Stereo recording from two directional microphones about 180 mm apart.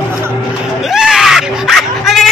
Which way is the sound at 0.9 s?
5° right (ahead or behind).